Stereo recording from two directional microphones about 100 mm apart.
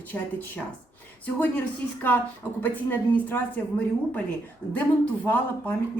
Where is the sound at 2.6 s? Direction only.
15° left (ahead or behind).